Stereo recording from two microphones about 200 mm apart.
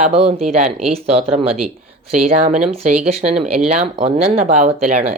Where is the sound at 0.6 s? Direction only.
Centre (ahead or behind).